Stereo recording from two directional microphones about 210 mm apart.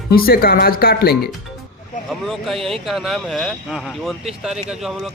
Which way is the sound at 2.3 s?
Centre (ahead or behind).